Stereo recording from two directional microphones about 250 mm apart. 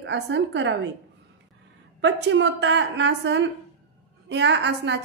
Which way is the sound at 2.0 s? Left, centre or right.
Right.